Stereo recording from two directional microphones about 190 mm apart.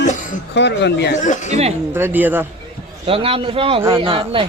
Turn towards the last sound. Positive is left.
turn(degrees=-30)  # may be behind; listen again after turning